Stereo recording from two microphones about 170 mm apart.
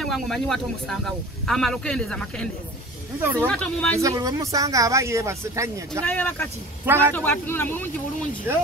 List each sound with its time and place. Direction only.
0.0 s speech: centre (ahead or behind)
3.2 s speech: 15° right (ahead or behind)
3.4 s a man's voice: 5° left (ahead or behind)
4.0 s speech: 20° right (ahead or behind)
6.0 s a man's voice: 10° left (ahead or behind)
6.8 s speech: 10° right (ahead or behind)
7.2 s a man's voice: 15° left (ahead or behind)